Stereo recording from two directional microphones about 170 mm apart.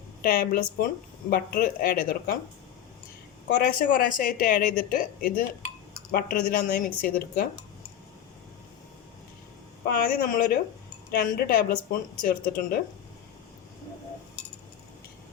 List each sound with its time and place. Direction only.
0.2 s a woman's voice: 60° left (ahead or behind)
3.8 s a woman's voice: 55° left (ahead or behind)
9.8 s a woman's voice: 60° left (ahead or behind)